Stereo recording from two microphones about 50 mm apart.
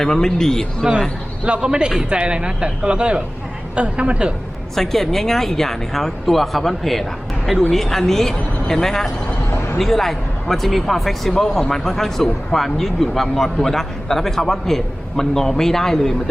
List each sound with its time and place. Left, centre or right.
0.0 s a man's voice: centre
1.6 s speech: centre
4.7 s a man's voice: centre